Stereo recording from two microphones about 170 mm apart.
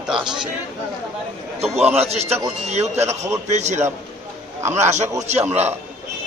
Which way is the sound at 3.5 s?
40° right (ahead or behind).